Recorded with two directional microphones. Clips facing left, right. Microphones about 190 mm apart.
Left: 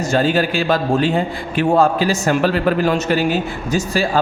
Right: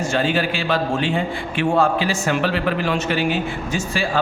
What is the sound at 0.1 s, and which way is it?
A man's voice, 40° left (ahead or behind).